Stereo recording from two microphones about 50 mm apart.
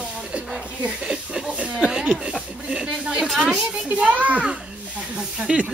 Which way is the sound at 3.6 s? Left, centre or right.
Centre.